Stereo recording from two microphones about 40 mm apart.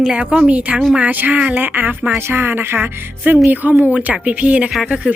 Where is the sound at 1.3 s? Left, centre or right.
Right.